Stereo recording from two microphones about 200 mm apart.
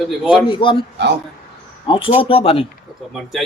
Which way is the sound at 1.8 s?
25° left (ahead or behind).